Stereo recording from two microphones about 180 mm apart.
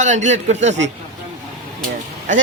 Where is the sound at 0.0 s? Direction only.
40° right (ahead or behind).